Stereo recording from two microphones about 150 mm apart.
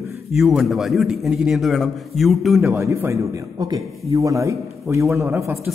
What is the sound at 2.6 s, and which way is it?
A man's voice, 20° right (ahead or behind).